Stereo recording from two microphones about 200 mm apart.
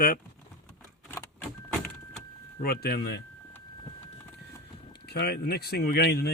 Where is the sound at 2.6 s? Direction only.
50° left (ahead or behind).